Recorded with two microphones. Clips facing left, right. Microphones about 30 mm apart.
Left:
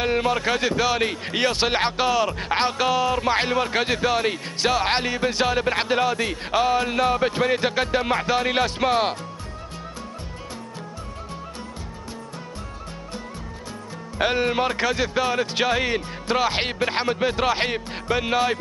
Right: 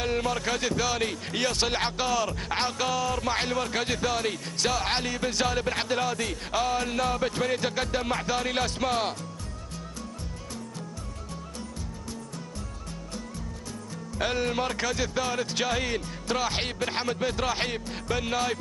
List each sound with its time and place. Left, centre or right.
0.0 s speech: left
14.1 s speech: left